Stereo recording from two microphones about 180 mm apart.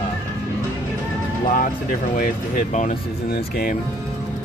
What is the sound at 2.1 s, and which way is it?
Speech, 45° left (ahead or behind).